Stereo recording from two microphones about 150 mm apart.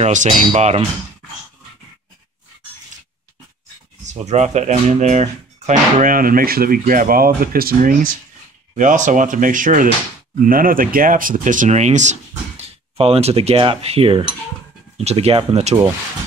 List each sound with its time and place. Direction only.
0.0 s speech: 55° right (ahead or behind)
4.0 s speech: 50° right (ahead or behind); by 8.1 s 70° right (ahead or behind)
8.7 s speech: 55° right (ahead or behind)